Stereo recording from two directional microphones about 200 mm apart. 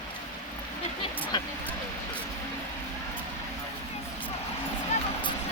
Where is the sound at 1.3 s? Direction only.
20° left (ahead or behind).